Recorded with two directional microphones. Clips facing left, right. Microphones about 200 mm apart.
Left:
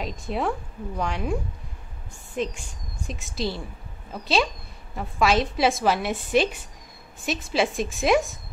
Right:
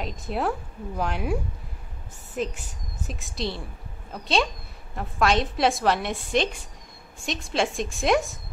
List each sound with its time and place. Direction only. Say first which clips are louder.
0.0 s a woman's voice: even; centre (ahead or behind)